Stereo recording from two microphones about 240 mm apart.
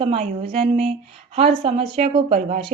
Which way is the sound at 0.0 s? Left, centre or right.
Right.